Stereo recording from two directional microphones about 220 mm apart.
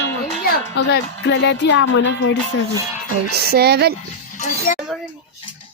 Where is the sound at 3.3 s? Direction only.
45° right (ahead or behind).